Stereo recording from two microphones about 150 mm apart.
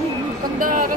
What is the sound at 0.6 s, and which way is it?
Speech, 65° right (ahead or behind).